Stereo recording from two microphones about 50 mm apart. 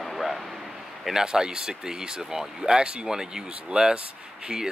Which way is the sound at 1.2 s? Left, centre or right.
Centre.